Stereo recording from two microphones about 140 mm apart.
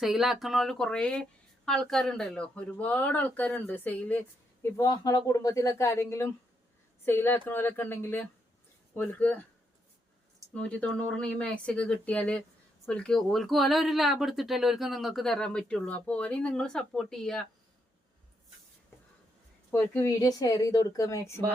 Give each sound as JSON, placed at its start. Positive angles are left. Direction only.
{"t": 0.0, "sound": "speech", "side_deg": 0}
{"t": 4.8, "sound": "a woman's voice", "side_deg": 25}
{"t": 10.5, "sound": "speech", "side_deg": 10}
{"t": 19.7, "sound": "a woman's voice", "side_deg": 15}